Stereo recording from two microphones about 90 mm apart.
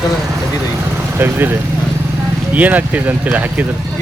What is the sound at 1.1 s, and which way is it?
A man's voice, 25° right (ahead or behind).